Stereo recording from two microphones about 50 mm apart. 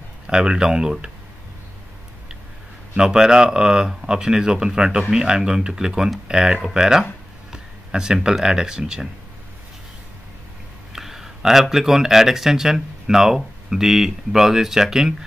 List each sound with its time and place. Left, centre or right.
0.3 s speech: centre
3.0 s speech: centre
10.9 s a sound: centre
11.7 s speech: centre